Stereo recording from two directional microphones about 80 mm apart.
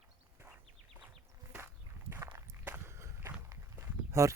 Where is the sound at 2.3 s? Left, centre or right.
Right.